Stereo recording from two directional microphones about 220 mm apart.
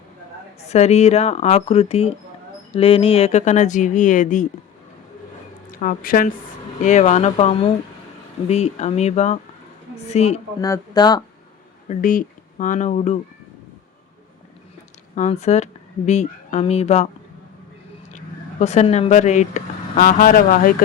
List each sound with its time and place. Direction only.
0.6 s speech: 30° left (ahead or behind)
5.8 s speech: 40° left (ahead or behind)
10.6 s speech: 15° left (ahead or behind)
11.9 s speech: 35° left (ahead or behind)
15.1 s speech: 30° left (ahead or behind)
18.6 s speech: 30° left (ahead or behind)